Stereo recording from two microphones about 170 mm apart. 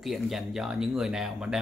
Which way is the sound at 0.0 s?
Centre (ahead or behind).